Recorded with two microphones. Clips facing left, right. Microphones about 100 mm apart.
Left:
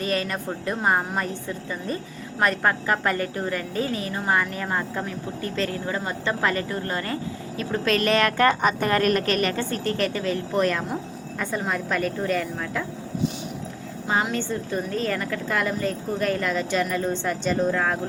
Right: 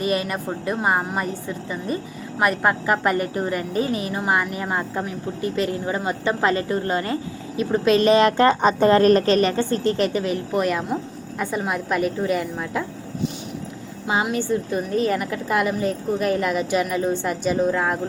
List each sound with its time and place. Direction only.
0.0 s a woman's voice: 15° right (ahead or behind)
14.1 s speech: 15° right (ahead or behind)